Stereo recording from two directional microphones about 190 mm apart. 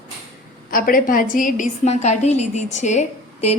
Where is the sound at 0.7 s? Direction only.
50° left (ahead or behind).